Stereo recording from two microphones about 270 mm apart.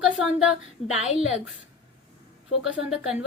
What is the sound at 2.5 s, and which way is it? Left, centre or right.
Speech, left.